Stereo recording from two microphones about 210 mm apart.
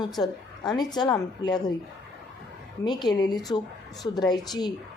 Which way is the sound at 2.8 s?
20° left (ahead or behind).